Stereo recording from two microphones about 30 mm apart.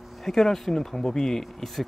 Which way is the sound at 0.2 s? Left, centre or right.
Centre.